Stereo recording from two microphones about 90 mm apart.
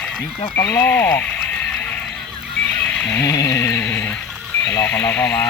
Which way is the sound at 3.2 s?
45° left (ahead or behind).